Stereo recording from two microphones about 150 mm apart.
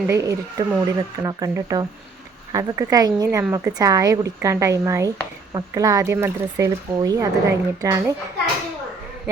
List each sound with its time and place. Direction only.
0.1 s speech: 20° right (ahead or behind)